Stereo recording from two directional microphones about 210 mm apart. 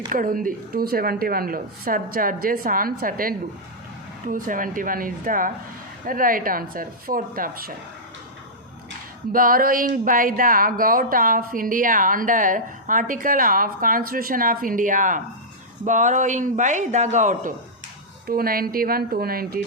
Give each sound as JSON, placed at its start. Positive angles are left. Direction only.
{"t": 0.1, "sound": "speech", "side_deg": -40}
{"t": 9.3, "sound": "speech", "side_deg": -45}